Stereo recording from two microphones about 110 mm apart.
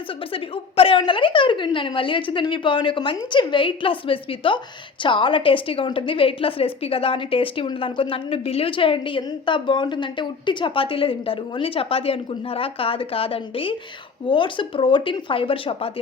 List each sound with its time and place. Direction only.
0.3 s a woman's voice: 55° left (ahead or behind)